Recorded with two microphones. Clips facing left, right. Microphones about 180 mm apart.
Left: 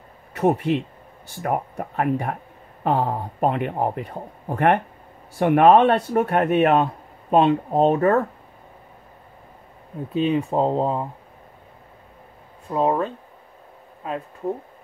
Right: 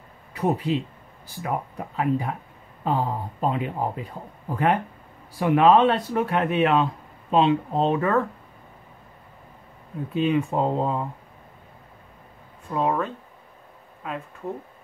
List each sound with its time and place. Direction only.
0.4 s speech: 70° left (ahead or behind)
1.4 s speech: 50° left (ahead or behind)
2.8 s speech: 75° left (ahead or behind)
5.4 s speech: 55° left (ahead or behind)
10.1 s speech: 35° left (ahead or behind)
12.7 s speech: 35° left (ahead or behind)